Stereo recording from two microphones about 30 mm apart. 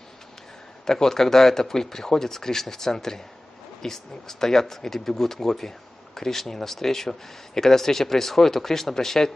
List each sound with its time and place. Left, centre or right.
0.8 s speech: centre